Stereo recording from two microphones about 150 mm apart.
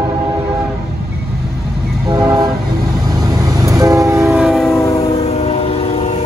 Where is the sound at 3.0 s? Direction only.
25° right (ahead or behind).